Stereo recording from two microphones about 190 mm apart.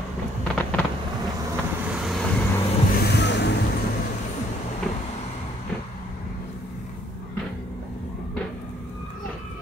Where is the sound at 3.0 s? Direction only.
65° left (ahead or behind).